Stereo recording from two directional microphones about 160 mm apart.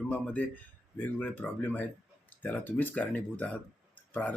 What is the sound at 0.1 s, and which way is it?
Speech, 10° left (ahead or behind).